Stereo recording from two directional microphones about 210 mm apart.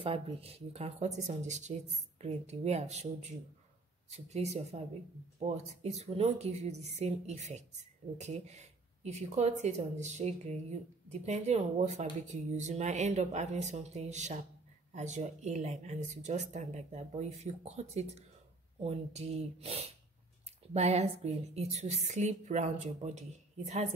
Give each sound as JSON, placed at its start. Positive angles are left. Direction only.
{"t": 0.0, "sound": "speech", "side_deg": -30}